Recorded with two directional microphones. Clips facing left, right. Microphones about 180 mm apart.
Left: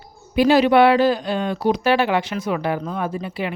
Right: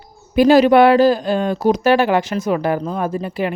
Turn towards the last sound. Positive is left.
turn(degrees=-45)  # may be behind; listen again after turning